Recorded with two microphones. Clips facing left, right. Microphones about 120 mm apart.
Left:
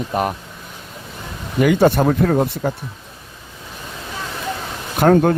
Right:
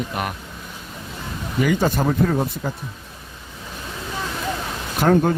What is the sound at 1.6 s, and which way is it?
Speech, 60° left (ahead or behind).